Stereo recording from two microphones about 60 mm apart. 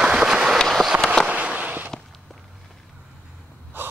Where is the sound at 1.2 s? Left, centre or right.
Right.